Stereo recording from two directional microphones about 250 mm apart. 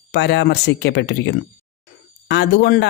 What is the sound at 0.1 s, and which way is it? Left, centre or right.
A woman's voice, left.